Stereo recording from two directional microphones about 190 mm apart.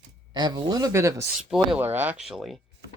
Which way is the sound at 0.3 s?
20° right (ahead or behind).